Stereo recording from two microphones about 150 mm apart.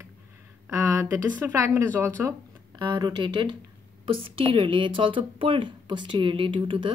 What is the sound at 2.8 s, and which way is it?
Speech, 30° right (ahead or behind).